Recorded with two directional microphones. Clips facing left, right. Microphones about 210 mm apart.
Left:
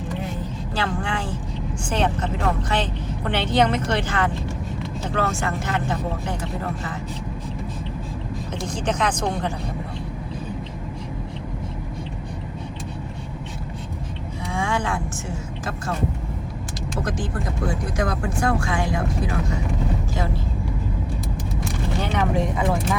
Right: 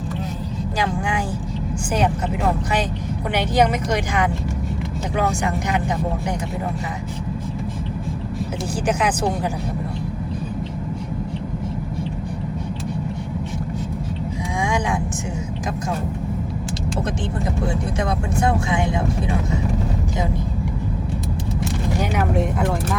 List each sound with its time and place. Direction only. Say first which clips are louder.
0.8 s speech: right 2 dB; 10° right (ahead or behind)
8.9 s speech: right 2 dB; 10° right (ahead or behind)
14.6 s a sound: right 2 dB; 15° right (ahead or behind)
17.9 s speech: right 2 dB; 25° right (ahead or behind)
22.1 s speech: left 1 dB; 5° right (ahead or behind)